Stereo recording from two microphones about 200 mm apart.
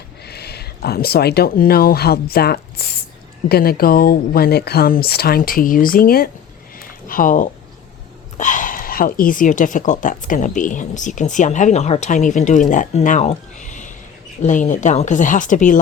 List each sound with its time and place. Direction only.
0.3 s speech: 55° left (ahead or behind)
6.7 s a sound: 45° left (ahead or behind)
8.4 s speech: 40° left (ahead or behind)